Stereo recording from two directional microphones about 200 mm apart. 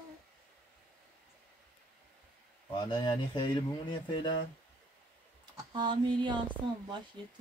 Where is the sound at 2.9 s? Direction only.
20° left (ahead or behind).